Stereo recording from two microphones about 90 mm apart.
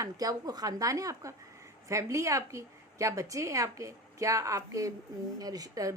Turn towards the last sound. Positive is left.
turn(degrees=-40)  # may be behind; listen again after turning